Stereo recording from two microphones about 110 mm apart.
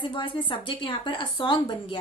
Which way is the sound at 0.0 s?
45° left (ahead or behind).